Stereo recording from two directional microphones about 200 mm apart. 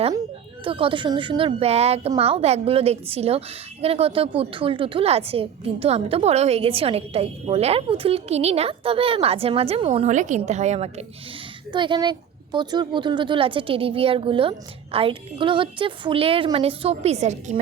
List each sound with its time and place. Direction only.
0.6 s a woman's voice: 25° right (ahead or behind)